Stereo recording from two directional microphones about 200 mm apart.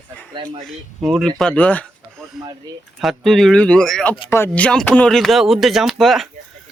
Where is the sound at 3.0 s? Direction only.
Centre (ahead or behind).